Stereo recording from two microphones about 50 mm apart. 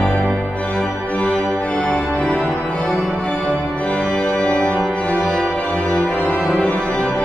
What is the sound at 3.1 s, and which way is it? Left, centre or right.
Music, left.